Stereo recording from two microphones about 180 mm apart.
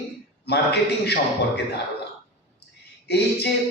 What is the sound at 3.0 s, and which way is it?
Speech, 65° left (ahead or behind).